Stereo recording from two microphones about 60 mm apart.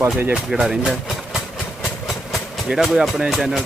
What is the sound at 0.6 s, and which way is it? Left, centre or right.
Speech, centre.